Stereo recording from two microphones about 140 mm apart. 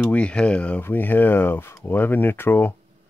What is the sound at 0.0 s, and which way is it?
Speech, 10° left (ahead or behind).